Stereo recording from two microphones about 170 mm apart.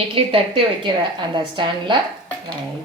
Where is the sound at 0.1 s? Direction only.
30° right (ahead or behind).